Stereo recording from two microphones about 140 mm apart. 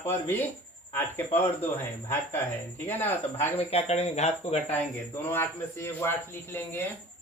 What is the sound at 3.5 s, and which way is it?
Speech, 50° left (ahead or behind).